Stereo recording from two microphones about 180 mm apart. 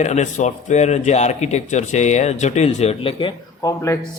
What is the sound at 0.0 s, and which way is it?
A man's voice, 40° left (ahead or behind).